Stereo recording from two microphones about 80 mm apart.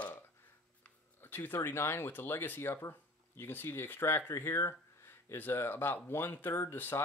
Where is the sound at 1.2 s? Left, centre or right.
Left.